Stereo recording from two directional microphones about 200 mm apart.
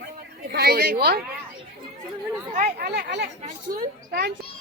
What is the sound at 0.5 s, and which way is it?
Speech, 50° right (ahead or behind).